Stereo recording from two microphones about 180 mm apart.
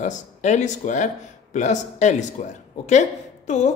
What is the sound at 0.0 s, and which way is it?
Speech, 40° left (ahead or behind).